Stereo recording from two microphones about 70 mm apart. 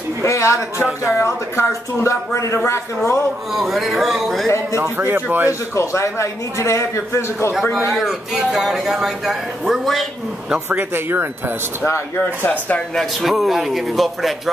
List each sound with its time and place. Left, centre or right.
0.2 s a man's voice: left
3.5 s speech: centre
4.7 s speech: right
5.5 s a man's voice: left
7.9 s speech: centre
10.7 s speech: right
12.4 s speech: centre
12.9 s speech: centre